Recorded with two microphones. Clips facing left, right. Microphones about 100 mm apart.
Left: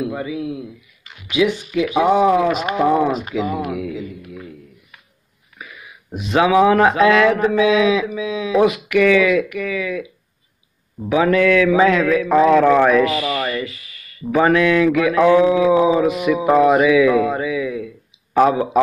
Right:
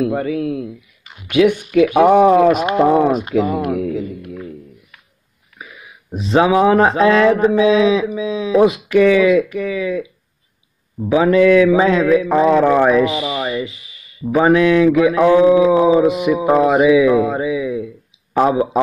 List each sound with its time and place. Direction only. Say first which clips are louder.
0.1 s speech: right 5 dB; 55° right (ahead or behind)
0.6 s speech: right 6 dB; centre (ahead or behind)
1.3 s speech: right 5 dB; 55° right (ahead or behind)
2.6 s speech: right 3 dB; 5° right (ahead or behind)
3.6 s a man's voice: right 5 dB; 45° right (ahead or behind)
5.6 s a sound: right 1 dB; 5° right (ahead or behind)
6.1 s speech: right 1 dB; 30° right (ahead or behind)
11.1 s speech: right 3 dB; 25° right (ahead or behind)
15.7 s speech: right 2 dB; 5° right (ahead or behind)
16.1 s speech: right 2 dB; 25° right (ahead or behind)
16.3 s mantra: left 3 dB; 5° right (ahead or behind)
16.6 s speech: right 2 dB; 25° right (ahead or behind)
18.4 s mantra: even; 15° right (ahead or behind)